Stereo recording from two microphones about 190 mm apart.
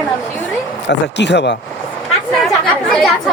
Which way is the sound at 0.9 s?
65° left (ahead or behind).